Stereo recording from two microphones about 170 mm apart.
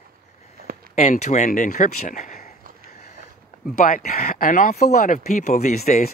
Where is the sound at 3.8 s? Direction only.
55° left (ahead or behind).